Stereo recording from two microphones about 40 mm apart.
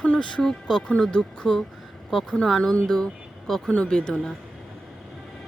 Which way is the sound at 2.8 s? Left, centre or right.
Centre.